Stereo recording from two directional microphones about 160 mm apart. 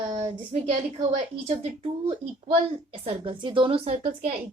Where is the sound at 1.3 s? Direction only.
35° right (ahead or behind).